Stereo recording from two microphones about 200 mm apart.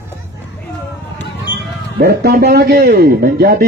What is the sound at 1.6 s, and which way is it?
A man's voice, 50° right (ahead or behind).